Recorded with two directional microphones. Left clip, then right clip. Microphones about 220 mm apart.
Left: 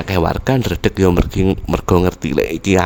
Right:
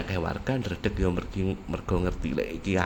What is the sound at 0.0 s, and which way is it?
Speech, 45° left (ahead or behind).